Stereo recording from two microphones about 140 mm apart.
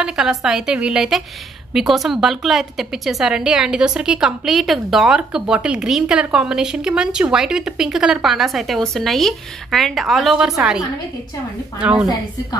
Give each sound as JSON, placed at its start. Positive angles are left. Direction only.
{"t": 0.0, "sound": "a woman's voice", "side_deg": -5}
{"t": 11.8, "sound": "a woman's voice", "side_deg": -10}